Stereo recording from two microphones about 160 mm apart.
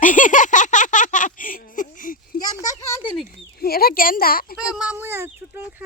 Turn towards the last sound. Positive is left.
turn(degrees=-10)  # may be behind; listen again after turning